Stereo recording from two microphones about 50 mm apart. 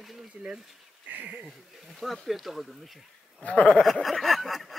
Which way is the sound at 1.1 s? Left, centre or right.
Right.